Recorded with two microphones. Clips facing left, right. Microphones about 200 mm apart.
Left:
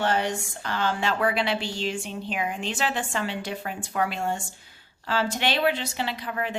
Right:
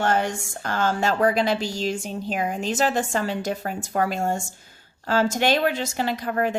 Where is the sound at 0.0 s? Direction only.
50° right (ahead or behind).